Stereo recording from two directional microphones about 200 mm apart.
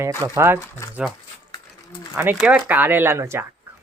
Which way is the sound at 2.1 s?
10° right (ahead or behind).